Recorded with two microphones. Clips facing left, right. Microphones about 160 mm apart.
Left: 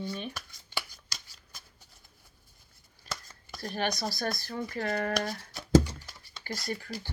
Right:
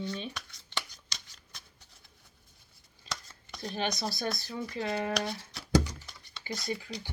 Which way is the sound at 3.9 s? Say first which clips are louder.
Left 1 dB; centre (ahead or behind).